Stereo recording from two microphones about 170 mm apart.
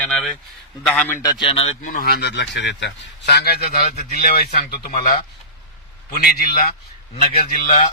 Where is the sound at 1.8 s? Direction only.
60° left (ahead or behind).